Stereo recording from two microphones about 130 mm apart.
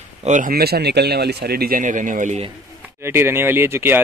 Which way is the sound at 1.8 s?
85° right.